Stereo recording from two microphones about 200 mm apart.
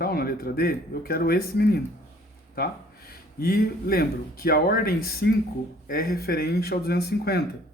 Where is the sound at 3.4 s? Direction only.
50° left (ahead or behind).